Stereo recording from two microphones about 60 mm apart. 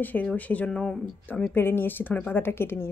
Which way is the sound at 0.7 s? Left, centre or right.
Centre.